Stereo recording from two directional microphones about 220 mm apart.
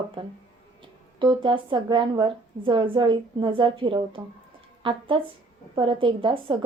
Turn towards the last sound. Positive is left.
turn(degrees=-25)  # may be behind; listen again after turning